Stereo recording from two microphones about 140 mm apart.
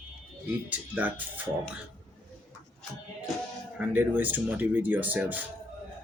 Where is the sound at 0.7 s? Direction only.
10° right (ahead or behind).